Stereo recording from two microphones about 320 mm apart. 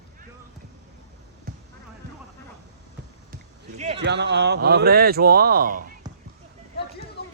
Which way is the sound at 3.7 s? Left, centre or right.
Right.